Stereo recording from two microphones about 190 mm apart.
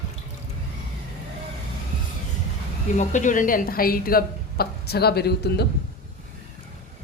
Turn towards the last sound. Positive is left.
turn(degrees=60)  # may be behind; listen again after turning